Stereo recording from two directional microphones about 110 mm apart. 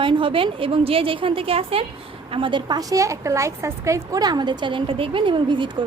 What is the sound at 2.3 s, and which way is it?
Speech, 50° right (ahead or behind).